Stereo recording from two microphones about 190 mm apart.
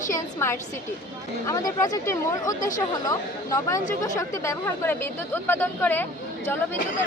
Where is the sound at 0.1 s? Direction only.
15° left (ahead or behind).